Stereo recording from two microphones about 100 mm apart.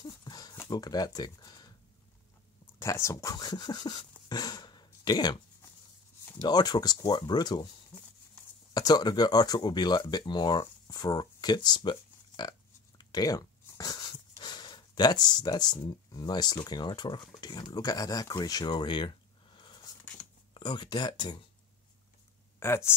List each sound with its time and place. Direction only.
0.0 s a sound: 40° left (ahead or behind)
0.7 s speech: 40° left (ahead or behind)
2.6 s speech: 30° left (ahead or behind); by 5.4 s 45° left (ahead or behind)
6.4 s speech: 45° left (ahead or behind)
8.7 s speech: 40° left (ahead or behind)
22.6 s speech: 25° left (ahead or behind)